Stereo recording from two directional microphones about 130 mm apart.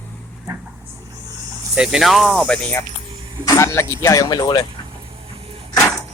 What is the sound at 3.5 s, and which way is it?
Speech, 20° left (ahead or behind).